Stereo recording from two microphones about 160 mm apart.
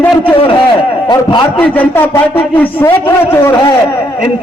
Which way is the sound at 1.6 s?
10° left (ahead or behind).